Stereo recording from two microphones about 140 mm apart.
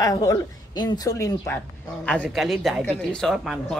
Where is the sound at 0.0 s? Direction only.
25° left (ahead or behind).